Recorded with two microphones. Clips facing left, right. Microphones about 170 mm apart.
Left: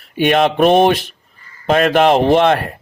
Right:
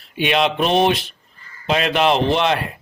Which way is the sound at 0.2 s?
50° left (ahead or behind).